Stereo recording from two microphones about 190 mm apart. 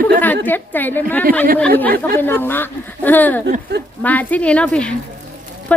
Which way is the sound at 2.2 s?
10° left (ahead or behind).